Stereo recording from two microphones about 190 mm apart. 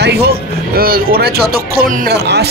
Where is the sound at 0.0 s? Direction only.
60° right (ahead or behind).